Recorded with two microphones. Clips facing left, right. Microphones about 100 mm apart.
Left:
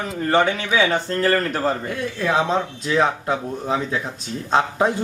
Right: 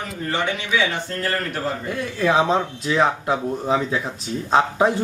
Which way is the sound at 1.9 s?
Centre (ahead or behind).